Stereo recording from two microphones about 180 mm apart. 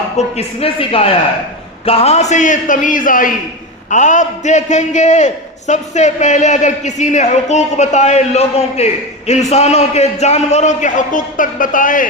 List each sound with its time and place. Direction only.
0.2 s a man's voice: 35° left (ahead or behind)